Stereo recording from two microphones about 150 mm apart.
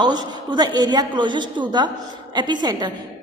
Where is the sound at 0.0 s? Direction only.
30° right (ahead or behind).